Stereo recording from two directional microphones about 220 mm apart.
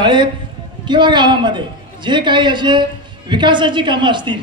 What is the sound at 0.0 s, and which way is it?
A man's voice, 20° right (ahead or behind).